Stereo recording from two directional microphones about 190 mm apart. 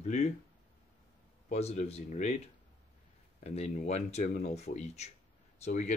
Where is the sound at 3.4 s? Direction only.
35° left (ahead or behind).